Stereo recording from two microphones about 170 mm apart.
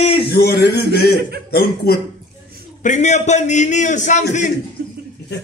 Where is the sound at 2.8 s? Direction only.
45° left (ahead or behind).